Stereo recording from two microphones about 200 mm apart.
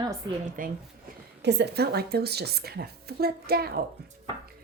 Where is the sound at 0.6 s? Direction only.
40° right (ahead or behind).